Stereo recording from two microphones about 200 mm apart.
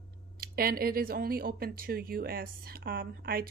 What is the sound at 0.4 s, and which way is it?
Speech, 50° right (ahead or behind).